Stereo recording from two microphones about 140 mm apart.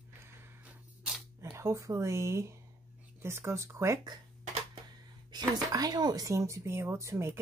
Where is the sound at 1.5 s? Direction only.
20° right (ahead or behind).